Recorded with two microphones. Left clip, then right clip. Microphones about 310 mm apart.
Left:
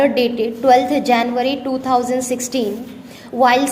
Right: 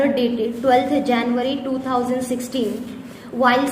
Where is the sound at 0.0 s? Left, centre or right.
Left.